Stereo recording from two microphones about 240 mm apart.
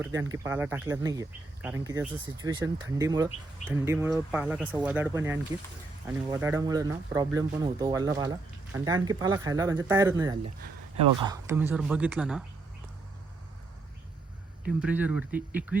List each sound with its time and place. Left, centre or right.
0.0 s speech: centre
14.8 s speech: centre